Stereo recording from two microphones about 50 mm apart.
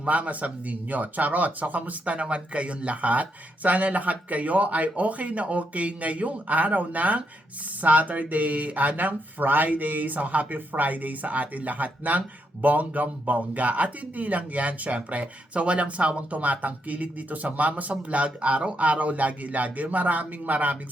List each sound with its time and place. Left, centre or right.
0.0 s speech: right